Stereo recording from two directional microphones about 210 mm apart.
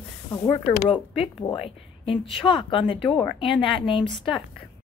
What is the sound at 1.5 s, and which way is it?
Speech, 25° left (ahead or behind).